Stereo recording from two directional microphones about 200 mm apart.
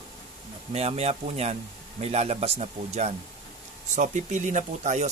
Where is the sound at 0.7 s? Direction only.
30° right (ahead or behind).